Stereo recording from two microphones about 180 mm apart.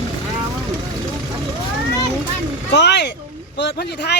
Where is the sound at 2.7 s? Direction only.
70° left (ahead or behind).